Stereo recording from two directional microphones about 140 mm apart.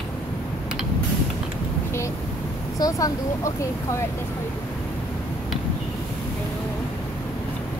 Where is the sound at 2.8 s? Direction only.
25° left (ahead or behind).